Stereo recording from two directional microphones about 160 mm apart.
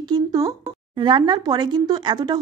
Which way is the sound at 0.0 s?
25° right (ahead or behind).